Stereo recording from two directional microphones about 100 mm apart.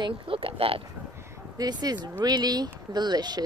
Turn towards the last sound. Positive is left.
turn(degrees=-45)  # may be behind; listen again after turning